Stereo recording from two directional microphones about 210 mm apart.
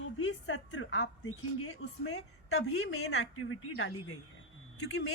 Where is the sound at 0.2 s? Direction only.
65° left (ahead or behind).